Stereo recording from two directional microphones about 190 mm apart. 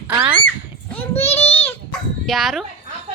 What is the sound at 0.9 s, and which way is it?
Speech, 10° left (ahead or behind).